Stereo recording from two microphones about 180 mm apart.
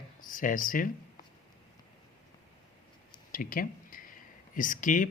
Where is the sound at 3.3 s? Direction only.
50° left (ahead or behind).